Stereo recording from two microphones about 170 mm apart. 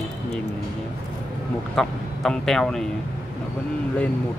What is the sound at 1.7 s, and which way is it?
A man's voice, centre (ahead or behind).